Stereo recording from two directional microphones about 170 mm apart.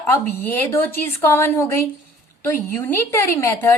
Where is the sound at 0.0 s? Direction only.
10° left (ahead or behind).